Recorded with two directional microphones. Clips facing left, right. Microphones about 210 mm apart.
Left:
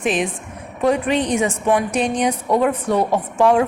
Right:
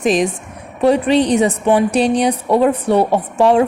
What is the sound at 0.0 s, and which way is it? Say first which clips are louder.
A woman's voice: right 5 dB; 40° right (ahead or behind).